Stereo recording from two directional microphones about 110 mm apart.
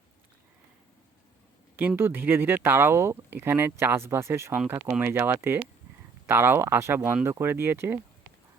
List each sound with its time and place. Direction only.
1.7 s speech: 15° right (ahead or behind)